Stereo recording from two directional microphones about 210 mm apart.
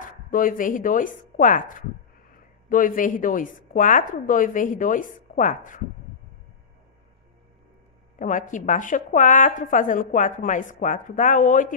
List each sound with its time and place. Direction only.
0.0 s a woman's voice: 40° left (ahead or behind)
8.2 s a woman's voice: 35° left (ahead or behind)